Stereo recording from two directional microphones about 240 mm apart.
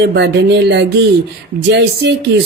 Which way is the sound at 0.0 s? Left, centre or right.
Right.